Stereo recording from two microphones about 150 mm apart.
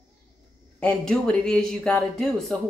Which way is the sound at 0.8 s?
5° left (ahead or behind).